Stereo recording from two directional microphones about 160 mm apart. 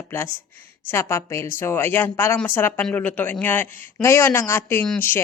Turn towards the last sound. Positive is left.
turn(degrees=10)  # may be behind; listen again after turning